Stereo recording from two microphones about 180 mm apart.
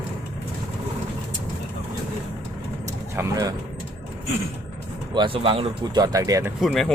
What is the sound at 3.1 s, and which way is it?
Speech, 20° right (ahead or behind).